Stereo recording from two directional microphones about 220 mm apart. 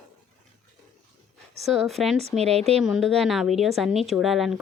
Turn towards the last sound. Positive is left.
turn(degrees=0)  # may be behind; listen again after turning